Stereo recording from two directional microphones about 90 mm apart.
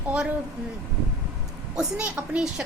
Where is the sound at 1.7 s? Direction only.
10° right (ahead or behind).